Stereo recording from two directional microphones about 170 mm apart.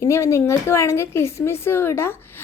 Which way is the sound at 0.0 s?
15° left (ahead or behind).